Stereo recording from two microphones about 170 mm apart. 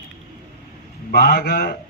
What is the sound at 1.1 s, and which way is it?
Speech, 65° left (ahead or behind).